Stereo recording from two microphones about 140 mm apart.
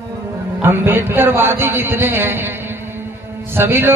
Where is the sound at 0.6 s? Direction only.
15° right (ahead or behind).